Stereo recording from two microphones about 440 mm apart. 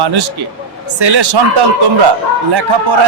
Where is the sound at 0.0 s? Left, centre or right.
Right.